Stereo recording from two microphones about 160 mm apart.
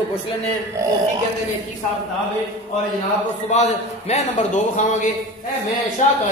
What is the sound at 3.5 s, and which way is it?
Speech, 45° left (ahead or behind).